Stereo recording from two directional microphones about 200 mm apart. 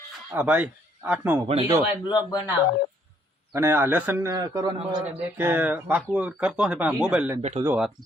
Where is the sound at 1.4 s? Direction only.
30° right (ahead or behind).